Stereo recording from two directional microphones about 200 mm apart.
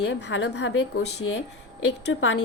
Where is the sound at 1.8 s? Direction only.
70° left (ahead or behind).